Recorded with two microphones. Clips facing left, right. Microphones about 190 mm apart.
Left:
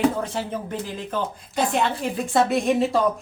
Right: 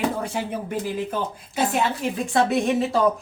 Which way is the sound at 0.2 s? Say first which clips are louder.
Even; 10° right (ahead or behind).